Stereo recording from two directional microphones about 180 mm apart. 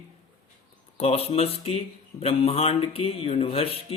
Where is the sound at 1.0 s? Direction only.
35° left (ahead or behind).